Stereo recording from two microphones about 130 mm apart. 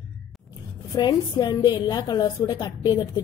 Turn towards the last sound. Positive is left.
turn(degrees=30)  # may be behind; listen again after turning